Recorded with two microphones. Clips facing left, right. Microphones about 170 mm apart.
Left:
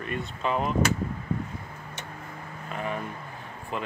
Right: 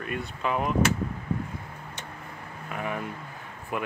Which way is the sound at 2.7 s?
15° right (ahead or behind).